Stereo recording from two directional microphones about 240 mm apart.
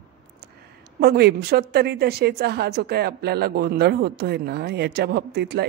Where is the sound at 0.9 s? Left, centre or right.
Right.